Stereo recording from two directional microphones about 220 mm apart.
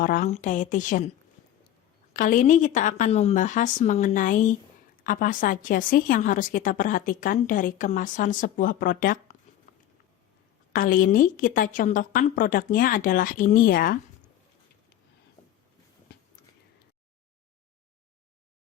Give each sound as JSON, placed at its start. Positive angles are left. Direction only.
{"t": 0.0, "sound": "a woman's voice", "side_deg": 35}
{"t": 2.1, "sound": "a woman's voice", "side_deg": 35}
{"t": 10.7, "sound": "a woman's voice", "side_deg": 40}